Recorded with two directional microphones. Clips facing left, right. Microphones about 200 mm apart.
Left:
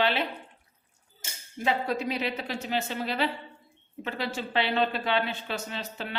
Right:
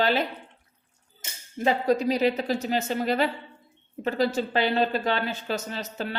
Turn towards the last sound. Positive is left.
turn(degrees=-40)  # may be behind; listen again after turning